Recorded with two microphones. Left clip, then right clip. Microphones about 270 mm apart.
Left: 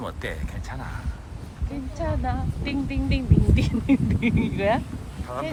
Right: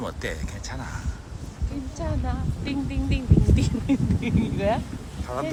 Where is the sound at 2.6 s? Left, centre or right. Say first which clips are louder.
Left 1 dB; left.